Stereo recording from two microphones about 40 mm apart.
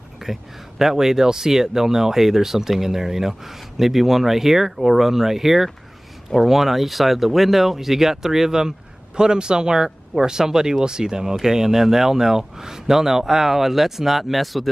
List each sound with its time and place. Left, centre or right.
0.2 s speech: centre